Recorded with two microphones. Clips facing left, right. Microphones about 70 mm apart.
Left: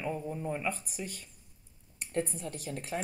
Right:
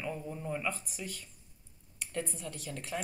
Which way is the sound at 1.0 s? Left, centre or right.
Left.